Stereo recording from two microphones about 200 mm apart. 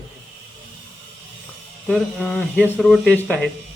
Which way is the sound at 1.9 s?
Centre (ahead or behind).